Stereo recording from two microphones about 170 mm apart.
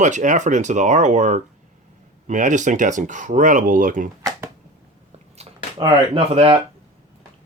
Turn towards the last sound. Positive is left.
turn(degrees=-35)  # may be behind; listen again after turning